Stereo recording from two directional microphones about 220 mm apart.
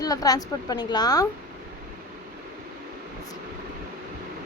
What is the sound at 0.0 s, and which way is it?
A woman's voice, 15° left (ahead or behind).